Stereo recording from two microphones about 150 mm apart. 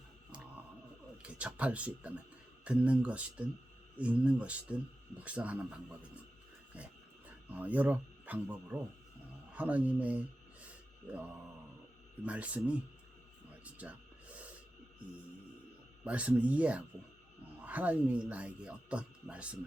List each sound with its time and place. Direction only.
1.2 s speech: 10° right (ahead or behind)
6.7 s a sound: 10° right (ahead or behind)
7.3 s speech: 10° right (ahead or behind)
16.0 s speech: 10° right (ahead or behind)